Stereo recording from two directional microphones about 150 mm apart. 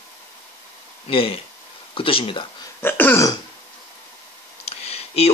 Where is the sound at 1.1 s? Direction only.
40° left (ahead or behind).